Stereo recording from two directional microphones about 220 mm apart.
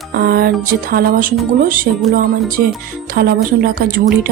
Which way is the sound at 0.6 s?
40° right (ahead or behind).